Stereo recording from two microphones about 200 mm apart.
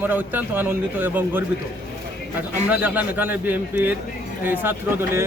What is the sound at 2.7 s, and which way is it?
Speech, 10° right (ahead or behind).